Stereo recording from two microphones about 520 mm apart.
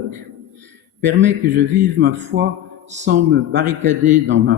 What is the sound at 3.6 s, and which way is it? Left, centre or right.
Speech, centre.